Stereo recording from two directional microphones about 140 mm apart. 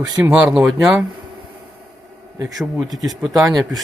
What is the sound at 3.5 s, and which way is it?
Speech, 25° right (ahead or behind).